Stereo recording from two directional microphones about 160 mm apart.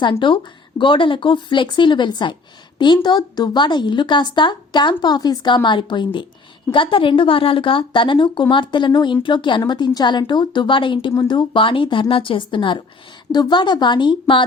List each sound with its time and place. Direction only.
0.0 s a woman's voice: 30° left (ahead or behind)